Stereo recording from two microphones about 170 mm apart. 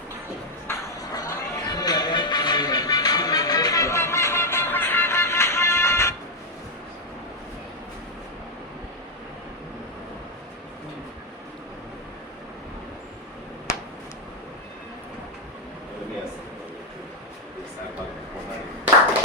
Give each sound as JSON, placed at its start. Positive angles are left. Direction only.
{"t": 0.7, "sound": "music", "side_deg": 20}